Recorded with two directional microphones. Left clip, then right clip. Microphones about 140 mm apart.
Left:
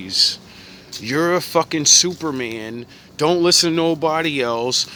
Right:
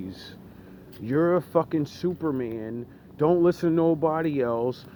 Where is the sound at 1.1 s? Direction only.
45° left (ahead or behind).